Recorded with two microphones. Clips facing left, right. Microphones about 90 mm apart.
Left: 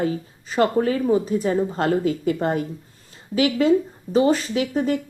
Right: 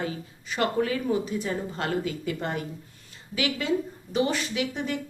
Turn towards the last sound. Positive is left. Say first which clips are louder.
# left 8 dB
turn(degrees=40)  # may be behind; listen again after turning